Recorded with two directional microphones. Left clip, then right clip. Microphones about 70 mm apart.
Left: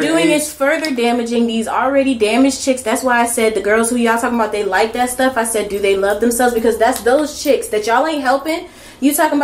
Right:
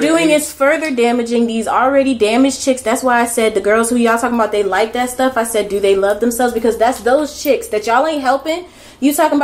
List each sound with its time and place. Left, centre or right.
0.0 s a woman's voice: right